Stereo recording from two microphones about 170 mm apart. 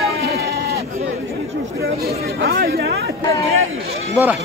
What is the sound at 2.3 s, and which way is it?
Chatter, 65° right (ahead or behind).